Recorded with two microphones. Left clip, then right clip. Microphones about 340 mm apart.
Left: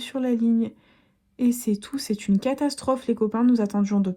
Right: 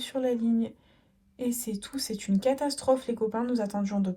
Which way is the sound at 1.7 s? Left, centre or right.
Left.